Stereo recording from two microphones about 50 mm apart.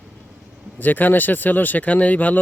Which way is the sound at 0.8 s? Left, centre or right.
Left.